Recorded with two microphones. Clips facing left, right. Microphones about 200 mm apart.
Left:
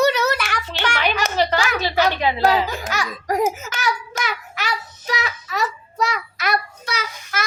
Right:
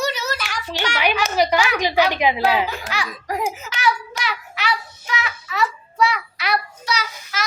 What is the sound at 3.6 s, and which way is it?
Child singing, 45° left (ahead or behind).